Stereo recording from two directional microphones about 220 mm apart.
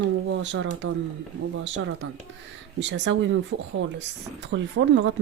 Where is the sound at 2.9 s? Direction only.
55° right (ahead or behind).